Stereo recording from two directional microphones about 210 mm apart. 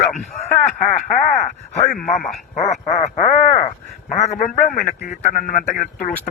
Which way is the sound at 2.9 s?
30° left (ahead or behind).